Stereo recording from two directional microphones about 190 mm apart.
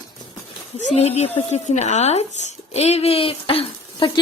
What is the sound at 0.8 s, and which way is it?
Speech, 35° left (ahead or behind).